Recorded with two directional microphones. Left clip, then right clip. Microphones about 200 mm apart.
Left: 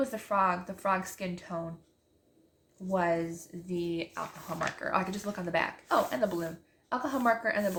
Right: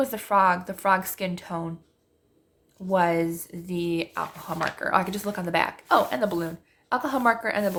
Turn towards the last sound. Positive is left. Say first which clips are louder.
# right 5 dB
turn(degrees=-45)  # may be behind; listen again after turning